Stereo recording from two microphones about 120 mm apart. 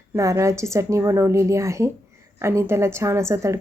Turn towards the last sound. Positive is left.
turn(degrees=-25)  # may be behind; listen again after turning